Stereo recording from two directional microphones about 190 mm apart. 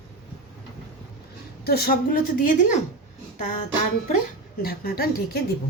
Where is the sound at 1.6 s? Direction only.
55° left (ahead or behind).